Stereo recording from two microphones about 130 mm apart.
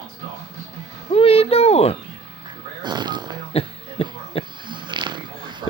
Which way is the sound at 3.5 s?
50° left (ahead or behind).